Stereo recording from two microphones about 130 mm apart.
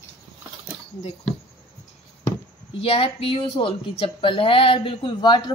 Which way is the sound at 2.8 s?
45° left (ahead or behind).